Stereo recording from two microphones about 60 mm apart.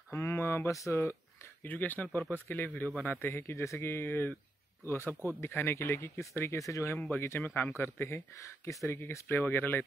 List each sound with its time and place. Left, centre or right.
0.1 s speech: left
0.9 s a sound: left
1.7 s speech: left
7.1 s speech: left
8.8 s speech: left
9.3 s speech: left